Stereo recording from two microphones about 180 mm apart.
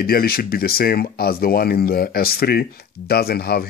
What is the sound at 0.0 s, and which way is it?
Speech, 55° left (ahead or behind).